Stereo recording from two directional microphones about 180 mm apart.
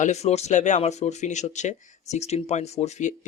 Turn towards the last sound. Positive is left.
turn(degrees=40)  # may be behind; listen again after turning